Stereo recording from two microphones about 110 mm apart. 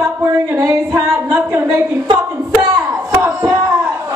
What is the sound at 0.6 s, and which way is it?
Music, 20° right (ahead or behind).